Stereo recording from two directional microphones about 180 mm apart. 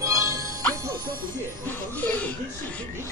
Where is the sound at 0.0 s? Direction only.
20° right (ahead or behind).